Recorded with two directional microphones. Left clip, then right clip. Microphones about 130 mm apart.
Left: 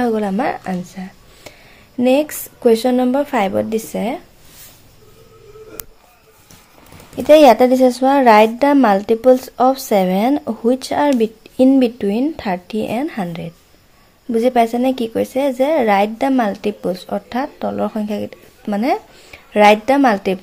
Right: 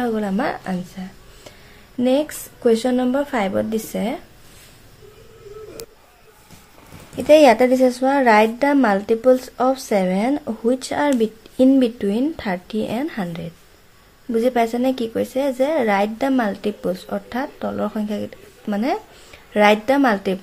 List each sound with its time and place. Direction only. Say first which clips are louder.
0.0 s a woman's voice: left 5 dB; 40° left (ahead or behind)
0.3 s a woman's voice: left 3 dB; 25° left (ahead or behind)
7.2 s a woman's voice: left 3 dB; 25° left (ahead or behind)